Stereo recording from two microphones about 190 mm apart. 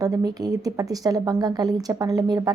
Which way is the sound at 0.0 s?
20° right (ahead or behind).